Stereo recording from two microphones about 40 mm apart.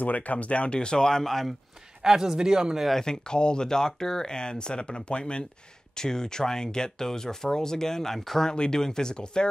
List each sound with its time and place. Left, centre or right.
0.0 s speech: left; by 1.5 s centre
2.0 s speech: centre
3.0 s speech: centre